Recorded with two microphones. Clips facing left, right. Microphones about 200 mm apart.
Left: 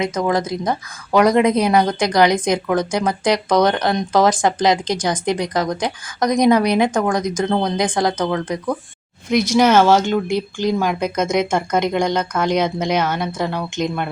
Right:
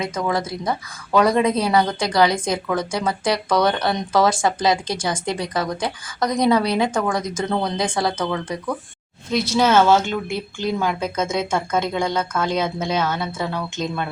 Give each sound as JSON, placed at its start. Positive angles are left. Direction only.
{"t": 0.0, "sound": "speech", "side_deg": 15}